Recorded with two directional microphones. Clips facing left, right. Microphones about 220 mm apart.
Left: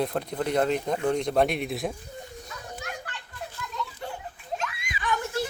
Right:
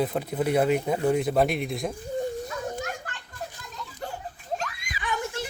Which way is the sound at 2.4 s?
45° right (ahead or behind).